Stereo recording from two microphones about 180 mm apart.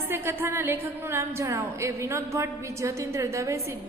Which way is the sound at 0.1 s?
15° right (ahead or behind).